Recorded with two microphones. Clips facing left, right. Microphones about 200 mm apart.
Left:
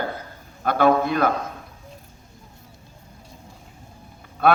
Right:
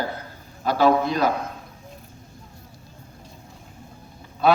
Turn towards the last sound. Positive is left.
turn(degrees=55)  # may be behind; listen again after turning